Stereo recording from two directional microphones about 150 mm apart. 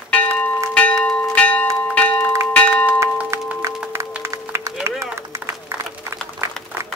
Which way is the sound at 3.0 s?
15° right (ahead or behind).